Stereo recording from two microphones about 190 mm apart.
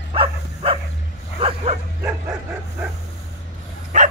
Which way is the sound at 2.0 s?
10° right (ahead or behind).